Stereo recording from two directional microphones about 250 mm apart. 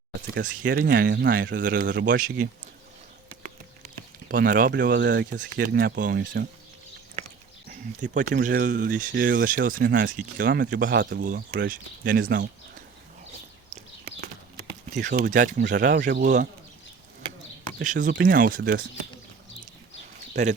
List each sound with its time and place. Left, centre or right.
0.3 s speech: right
1.9 s speech: right
8.0 s speech: right
15.0 s speech: right
17.7 s speech: right